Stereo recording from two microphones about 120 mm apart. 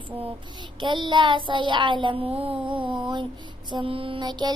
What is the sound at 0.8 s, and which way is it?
Child singing, 40° right (ahead or behind).